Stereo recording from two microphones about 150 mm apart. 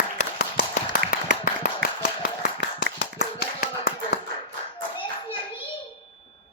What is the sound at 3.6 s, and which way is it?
Clapping, 90° left.